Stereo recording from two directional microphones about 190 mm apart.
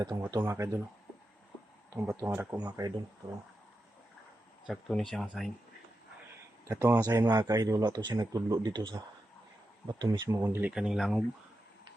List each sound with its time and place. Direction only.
0.3 s speech: 15° right (ahead or behind)
2.0 s speech: 10° right (ahead or behind)
4.6 s speech: centre (ahead or behind)
6.7 s speech: 15° right (ahead or behind)
9.8 s speech: 20° right (ahead or behind); by 11.2 s centre (ahead or behind)